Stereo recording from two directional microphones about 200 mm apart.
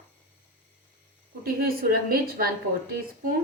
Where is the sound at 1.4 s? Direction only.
50° right (ahead or behind).